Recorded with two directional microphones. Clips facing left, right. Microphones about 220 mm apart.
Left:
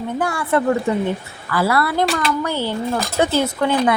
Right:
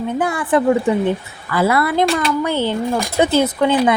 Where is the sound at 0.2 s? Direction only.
20° right (ahead or behind).